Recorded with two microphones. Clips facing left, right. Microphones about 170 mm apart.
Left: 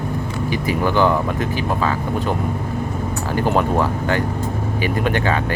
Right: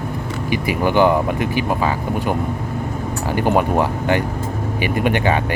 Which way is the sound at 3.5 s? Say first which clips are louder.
Right 1 dB; 15° right (ahead or behind).